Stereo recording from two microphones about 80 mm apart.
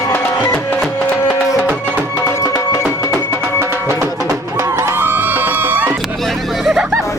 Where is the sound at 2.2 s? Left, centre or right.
Left.